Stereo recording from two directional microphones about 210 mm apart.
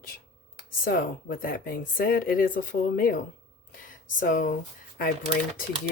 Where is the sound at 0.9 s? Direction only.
45° left (ahead or behind).